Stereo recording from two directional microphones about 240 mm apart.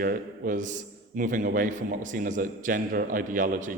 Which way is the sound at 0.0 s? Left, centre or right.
Right.